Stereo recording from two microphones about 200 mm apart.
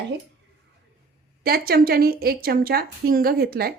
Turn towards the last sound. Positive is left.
turn(degrees=-50)  # may be behind; listen again after turning